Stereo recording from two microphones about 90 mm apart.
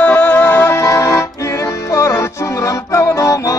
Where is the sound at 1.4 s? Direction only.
30° left (ahead or behind).